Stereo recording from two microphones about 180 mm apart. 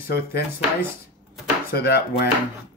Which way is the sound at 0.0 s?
60° left (ahead or behind).